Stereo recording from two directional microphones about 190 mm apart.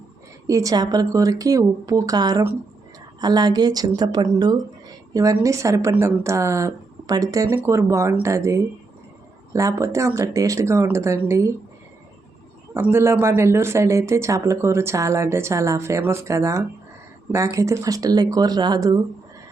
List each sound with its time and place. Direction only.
0.4 s speech: 15° right (ahead or behind)
12.7 s speech: 10° right (ahead or behind)